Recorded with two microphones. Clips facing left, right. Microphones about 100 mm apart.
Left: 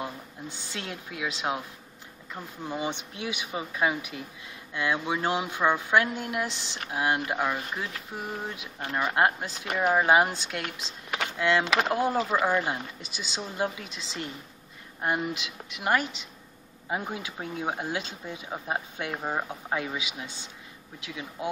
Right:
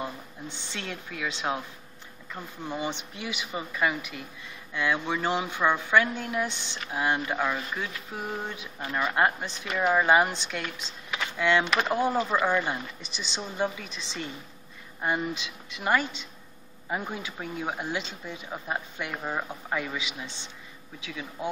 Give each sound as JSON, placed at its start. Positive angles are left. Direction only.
{"t": 0.7, "sound": "speech", "side_deg": 5}
{"t": 3.8, "sound": "speech", "side_deg": 20}
{"t": 4.7, "sound": "speech", "side_deg": 5}